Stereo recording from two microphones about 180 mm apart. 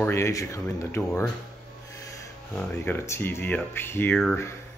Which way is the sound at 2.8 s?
15° left (ahead or behind).